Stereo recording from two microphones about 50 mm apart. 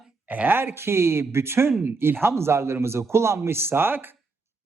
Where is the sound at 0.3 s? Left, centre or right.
Right.